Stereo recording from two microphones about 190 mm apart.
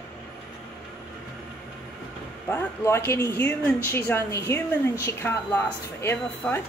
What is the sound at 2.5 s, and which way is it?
A woman's voice, 10° left (ahead or behind).